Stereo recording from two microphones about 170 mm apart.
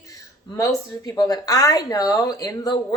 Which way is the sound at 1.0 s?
20° left (ahead or behind).